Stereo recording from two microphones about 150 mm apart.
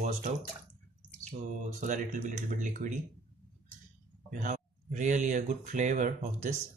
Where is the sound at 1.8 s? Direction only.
60° right (ahead or behind).